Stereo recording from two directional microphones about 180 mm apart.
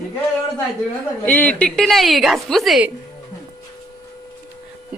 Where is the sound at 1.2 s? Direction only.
10° left (ahead or behind).